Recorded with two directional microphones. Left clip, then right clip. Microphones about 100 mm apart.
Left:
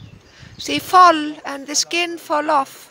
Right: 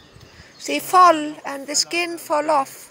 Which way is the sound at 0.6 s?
45° left (ahead or behind).